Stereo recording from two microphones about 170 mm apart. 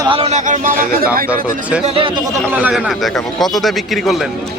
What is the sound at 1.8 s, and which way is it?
Speech, 35° right (ahead or behind).